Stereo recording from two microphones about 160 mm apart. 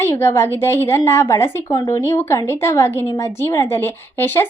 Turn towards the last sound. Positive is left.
turn(degrees=15)  # may be behind; listen again after turning